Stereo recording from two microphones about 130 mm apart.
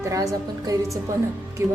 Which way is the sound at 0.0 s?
25° right (ahead or behind).